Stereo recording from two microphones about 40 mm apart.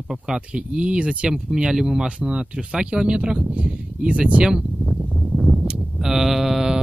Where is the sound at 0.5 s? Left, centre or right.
Right.